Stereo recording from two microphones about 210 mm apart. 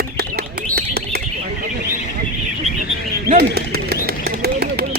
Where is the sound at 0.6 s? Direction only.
50° right (ahead or behind).